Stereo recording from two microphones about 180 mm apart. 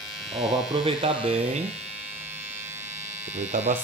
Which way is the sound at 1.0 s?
30° right (ahead or behind).